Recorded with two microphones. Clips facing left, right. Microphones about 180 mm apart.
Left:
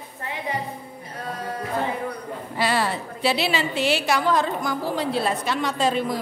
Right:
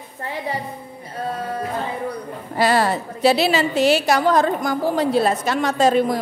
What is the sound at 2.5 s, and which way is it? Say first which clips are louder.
A woman's voice: right 6 dB; 45° right (ahead or behind).